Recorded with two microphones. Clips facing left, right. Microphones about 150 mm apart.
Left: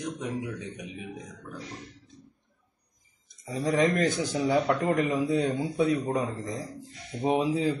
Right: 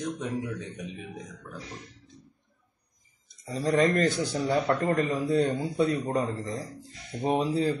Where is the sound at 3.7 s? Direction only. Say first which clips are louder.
Right 1 dB; 10° left (ahead or behind).